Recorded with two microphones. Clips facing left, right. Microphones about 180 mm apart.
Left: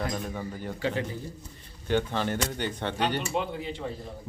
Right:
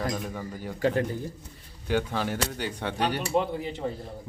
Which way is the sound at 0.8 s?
50° right (ahead or behind).